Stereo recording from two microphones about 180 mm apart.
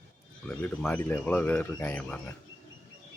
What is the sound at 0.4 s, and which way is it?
Speech, 10° left (ahead or behind).